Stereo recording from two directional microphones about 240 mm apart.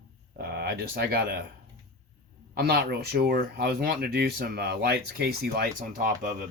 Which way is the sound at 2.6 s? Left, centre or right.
Right.